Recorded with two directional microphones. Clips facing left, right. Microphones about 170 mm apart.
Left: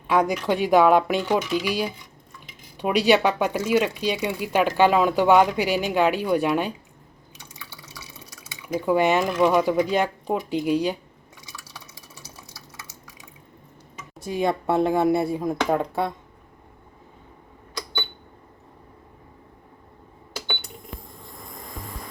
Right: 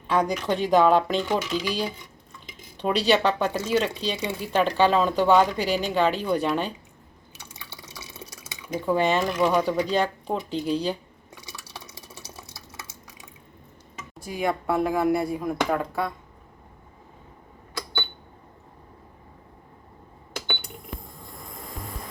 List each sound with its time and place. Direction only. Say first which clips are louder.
0.1 s speech: left 2 dB; 10° left (ahead or behind)
8.6 s speech: left 3 dB; 10° left (ahead or behind)
14.2 s speech: left 3 dB; 25° left (ahead or behind)